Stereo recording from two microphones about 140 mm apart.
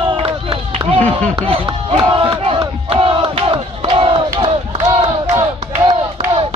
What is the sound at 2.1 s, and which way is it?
Battle cry, 35° right (ahead or behind).